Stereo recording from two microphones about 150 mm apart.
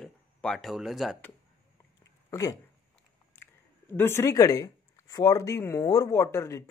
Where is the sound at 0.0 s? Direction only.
5° left (ahead or behind).